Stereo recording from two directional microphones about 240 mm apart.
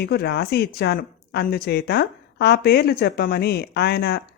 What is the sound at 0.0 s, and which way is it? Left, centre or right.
Speech, left.